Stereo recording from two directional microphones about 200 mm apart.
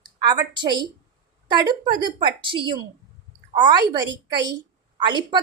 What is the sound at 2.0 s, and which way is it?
A woman's voice, 25° right (ahead or behind).